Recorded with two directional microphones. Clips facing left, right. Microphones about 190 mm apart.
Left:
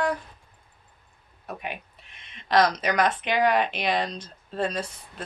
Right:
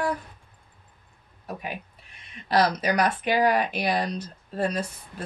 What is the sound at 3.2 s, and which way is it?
Speech, 40° right (ahead or behind).